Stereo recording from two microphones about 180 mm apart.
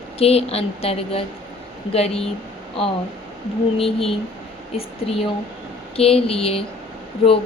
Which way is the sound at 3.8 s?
30° left (ahead or behind).